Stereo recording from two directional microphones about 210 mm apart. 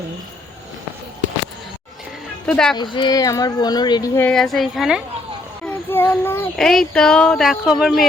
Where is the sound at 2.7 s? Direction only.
20° left (ahead or behind); by 5.0 s centre (ahead or behind).